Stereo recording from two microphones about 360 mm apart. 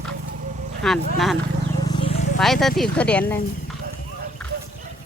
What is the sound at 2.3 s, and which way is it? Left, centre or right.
Speech, centre.